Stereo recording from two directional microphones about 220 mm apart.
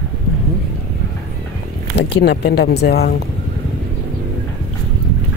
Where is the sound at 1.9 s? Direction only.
50° left (ahead or behind).